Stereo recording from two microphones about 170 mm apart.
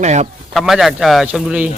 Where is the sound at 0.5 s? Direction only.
Centre (ahead or behind).